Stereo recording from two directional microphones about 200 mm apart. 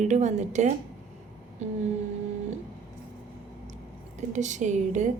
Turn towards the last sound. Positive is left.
turn(degrees=-35)  # may be behind; listen again after turning